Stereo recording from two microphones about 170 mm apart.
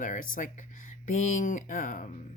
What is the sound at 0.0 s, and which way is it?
Speech, 50° left (ahead or behind).